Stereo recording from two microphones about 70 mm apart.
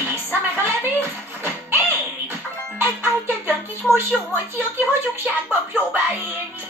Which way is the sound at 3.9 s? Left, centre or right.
Right.